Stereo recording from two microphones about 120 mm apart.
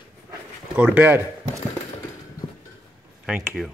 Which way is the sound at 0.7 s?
15° right (ahead or behind).